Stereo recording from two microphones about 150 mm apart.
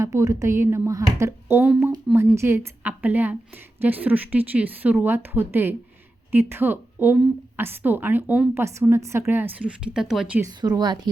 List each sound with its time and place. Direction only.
0.0 s a woman's voice: 20° right (ahead or behind); by 10.4 s 5° right (ahead or behind)
10.4 s a woman's voice: 25° right (ahead or behind)